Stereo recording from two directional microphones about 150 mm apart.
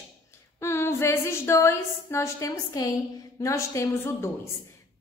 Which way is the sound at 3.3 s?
20° left (ahead or behind).